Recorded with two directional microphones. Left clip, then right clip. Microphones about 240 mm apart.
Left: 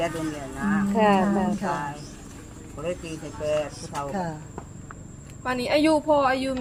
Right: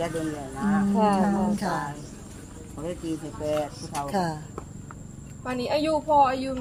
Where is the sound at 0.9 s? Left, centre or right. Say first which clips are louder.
Left 4 dB; left.